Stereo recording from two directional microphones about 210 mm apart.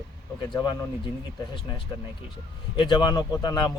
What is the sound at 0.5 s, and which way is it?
Speech, 20° left (ahead or behind).